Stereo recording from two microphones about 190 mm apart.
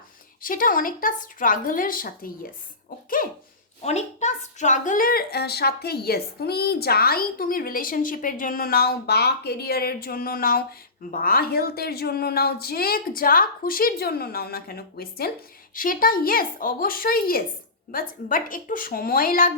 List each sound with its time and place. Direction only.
0.4 s a woman's voice: 45° left (ahead or behind)
3.8 s a woman's voice: 35° left (ahead or behind)